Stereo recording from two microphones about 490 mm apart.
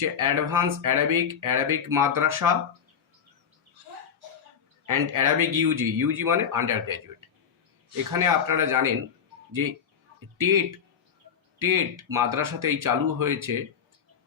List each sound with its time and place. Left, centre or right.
0.2 s speech: right
4.9 s speech: right
8.1 s speech: right
10.3 s a man's voice: right
11.6 s speech: right